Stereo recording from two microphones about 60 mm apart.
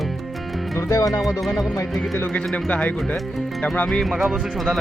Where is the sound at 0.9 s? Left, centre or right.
Left.